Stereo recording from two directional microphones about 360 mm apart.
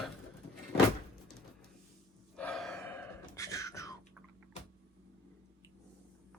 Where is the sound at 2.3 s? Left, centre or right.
Centre.